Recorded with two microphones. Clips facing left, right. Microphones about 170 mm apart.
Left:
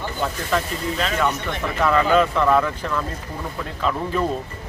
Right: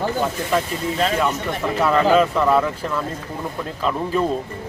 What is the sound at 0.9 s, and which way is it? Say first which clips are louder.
Speech: right 6 dB; 35° right (ahead or behind).